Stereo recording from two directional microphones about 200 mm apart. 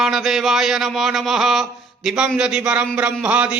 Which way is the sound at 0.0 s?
Centre (ahead or behind).